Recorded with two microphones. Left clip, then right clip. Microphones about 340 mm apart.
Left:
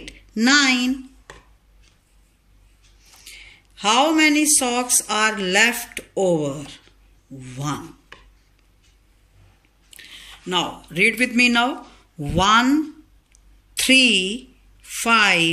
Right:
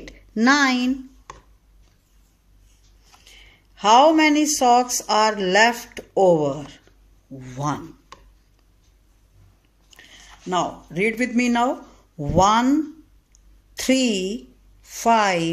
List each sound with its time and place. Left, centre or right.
0.0 s a woman's voice: right
3.3 s speech: right
9.8 s speech: right